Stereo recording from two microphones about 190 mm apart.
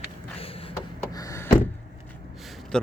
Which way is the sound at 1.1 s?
15° left (ahead or behind).